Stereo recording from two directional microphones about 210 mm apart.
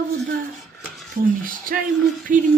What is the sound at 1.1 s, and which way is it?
Speech, 40° right (ahead or behind).